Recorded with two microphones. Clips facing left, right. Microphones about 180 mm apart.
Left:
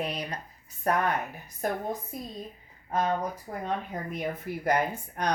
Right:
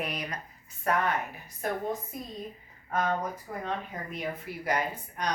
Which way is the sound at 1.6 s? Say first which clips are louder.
Left 2 dB; 45° left (ahead or behind).